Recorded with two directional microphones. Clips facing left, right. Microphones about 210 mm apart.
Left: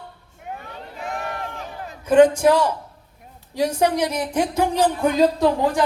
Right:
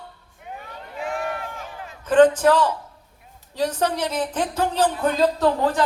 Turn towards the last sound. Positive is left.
turn(degrees=10)  # may be behind; listen again after turning